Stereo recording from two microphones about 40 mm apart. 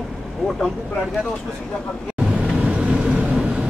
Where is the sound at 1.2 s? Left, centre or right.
Left.